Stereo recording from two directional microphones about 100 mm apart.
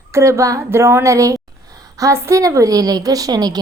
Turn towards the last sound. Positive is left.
turn(degrees=-40)  # may be behind; listen again after turning